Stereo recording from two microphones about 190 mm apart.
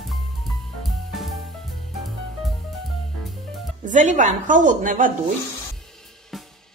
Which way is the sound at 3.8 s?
40° right (ahead or behind).